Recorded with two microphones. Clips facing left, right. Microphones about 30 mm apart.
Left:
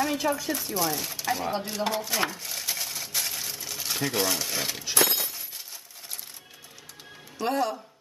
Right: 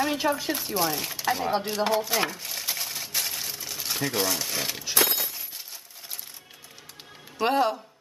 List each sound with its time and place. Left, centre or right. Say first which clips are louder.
0.0 s speech: right 1 dB; centre
1.9 s a sound: right 1 dB; centre
7.3 s a man's voice: right 4 dB; right